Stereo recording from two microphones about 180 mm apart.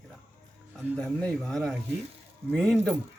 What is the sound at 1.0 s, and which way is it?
Speech, 5° left (ahead or behind).